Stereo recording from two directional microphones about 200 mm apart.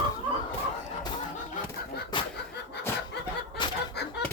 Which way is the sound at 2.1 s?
25° left (ahead or behind).